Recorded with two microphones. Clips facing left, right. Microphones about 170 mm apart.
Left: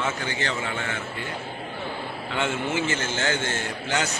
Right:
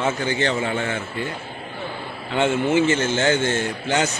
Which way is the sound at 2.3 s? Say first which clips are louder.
Right 8 dB; 20° right (ahead or behind).